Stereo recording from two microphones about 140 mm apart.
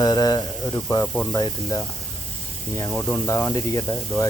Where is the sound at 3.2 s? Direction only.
20° left (ahead or behind).